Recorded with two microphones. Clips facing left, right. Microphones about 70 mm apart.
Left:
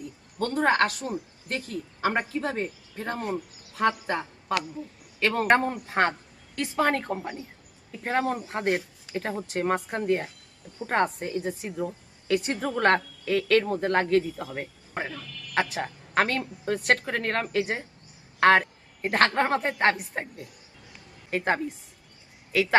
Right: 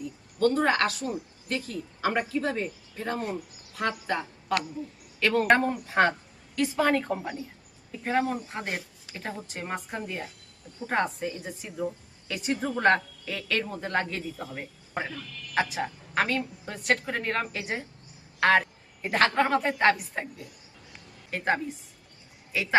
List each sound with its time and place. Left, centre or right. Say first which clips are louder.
0.3 s a man's voice: even; left
8.0 s a woman's voice: left 1 dB; left
21.2 s a woman's voice: left 1 dB; left